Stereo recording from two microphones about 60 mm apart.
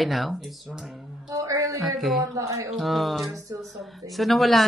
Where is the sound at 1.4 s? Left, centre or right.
Right.